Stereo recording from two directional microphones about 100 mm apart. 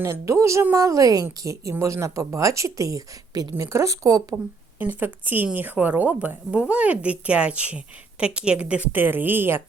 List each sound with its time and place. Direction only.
0.0 s a woman's voice: 30° right (ahead or behind)
4.8 s a woman's voice: 20° right (ahead or behind)